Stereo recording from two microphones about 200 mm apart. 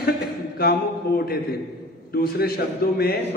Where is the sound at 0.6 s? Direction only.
50° left (ahead or behind).